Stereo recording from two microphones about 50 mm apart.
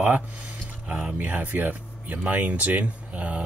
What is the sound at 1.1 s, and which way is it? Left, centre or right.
Speech, right.